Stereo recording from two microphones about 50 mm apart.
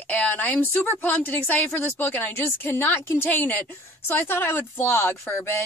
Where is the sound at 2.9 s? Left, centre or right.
Left.